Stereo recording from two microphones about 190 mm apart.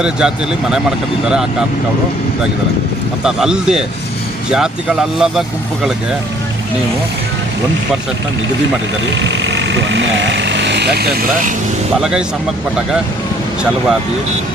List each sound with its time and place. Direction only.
0.0 s speech: 5° right (ahead or behind)
3.2 s speech: 5° right (ahead or behind)
9.1 s speech: 75° right (ahead or behind); by 11.5 s 55° right (ahead or behind)